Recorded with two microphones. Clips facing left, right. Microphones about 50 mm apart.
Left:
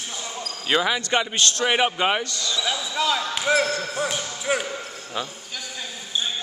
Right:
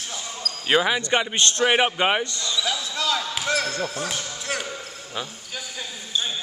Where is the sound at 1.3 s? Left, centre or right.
Right.